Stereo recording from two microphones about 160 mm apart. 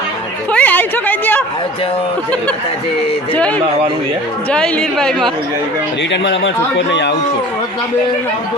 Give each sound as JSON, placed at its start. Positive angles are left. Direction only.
{"t": 0.5, "sound": "a sound", "side_deg": 10}
{"t": 4.5, "sound": "speech", "side_deg": 5}
{"t": 6.7, "sound": "speech", "side_deg": 90}